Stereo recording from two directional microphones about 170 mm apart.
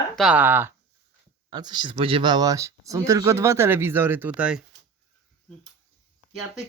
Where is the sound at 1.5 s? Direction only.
25° right (ahead or behind); by 4.6 s 5° right (ahead or behind).